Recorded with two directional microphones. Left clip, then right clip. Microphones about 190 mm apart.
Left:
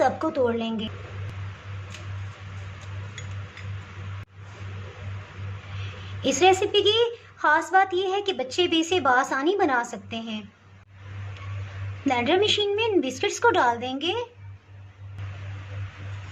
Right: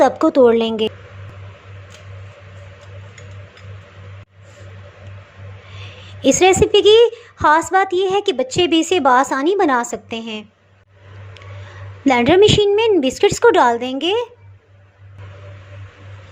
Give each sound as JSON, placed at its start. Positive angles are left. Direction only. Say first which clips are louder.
{"t": 0.0, "sound": "a woman's voice", "louder": "right 11 dB", "side_deg": -40}
{"t": 5.8, "sound": "a woman's voice", "louder": "right 10 dB", "side_deg": -35}
{"t": 12.0, "sound": "a woman's voice", "louder": "right 10 dB", "side_deg": -35}